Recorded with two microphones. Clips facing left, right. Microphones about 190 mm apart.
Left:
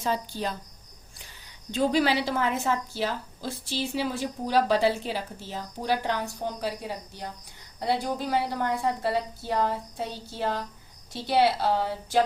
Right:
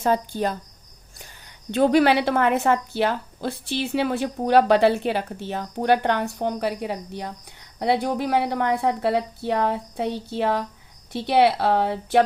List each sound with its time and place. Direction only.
0.0 s speech: 50° right (ahead or behind)
1.7 s a woman's voice: 60° right (ahead or behind)